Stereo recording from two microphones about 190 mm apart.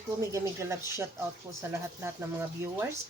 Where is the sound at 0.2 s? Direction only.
15° right (ahead or behind).